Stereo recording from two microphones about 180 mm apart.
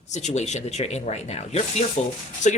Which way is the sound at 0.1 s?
40° left (ahead or behind).